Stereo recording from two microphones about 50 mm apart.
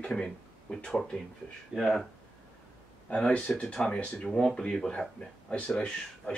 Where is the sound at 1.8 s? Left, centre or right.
Centre.